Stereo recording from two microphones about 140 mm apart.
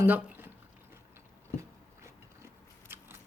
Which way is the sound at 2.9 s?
15° right (ahead or behind).